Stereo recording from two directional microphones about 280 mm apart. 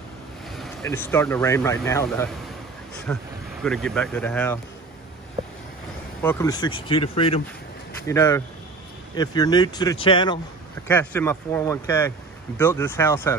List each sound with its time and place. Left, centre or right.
0.5 s speech: centre
6.2 s speech: centre